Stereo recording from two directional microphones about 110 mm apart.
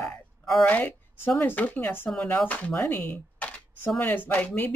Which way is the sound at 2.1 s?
10° left (ahead or behind).